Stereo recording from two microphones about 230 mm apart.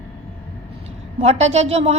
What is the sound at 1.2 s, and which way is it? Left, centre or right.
Speech, right.